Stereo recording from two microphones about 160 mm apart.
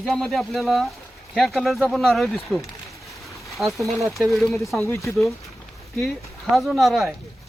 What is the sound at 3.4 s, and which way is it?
Speech, centre (ahead or behind).